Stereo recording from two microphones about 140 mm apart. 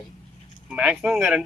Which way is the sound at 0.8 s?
10° right (ahead or behind).